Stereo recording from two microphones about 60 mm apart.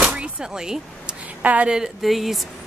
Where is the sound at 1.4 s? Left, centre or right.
Right.